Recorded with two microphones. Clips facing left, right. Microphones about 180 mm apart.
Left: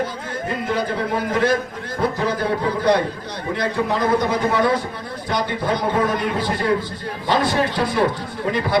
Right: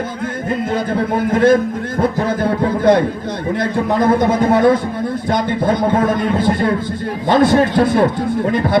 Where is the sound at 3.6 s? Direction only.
50° right (ahead or behind).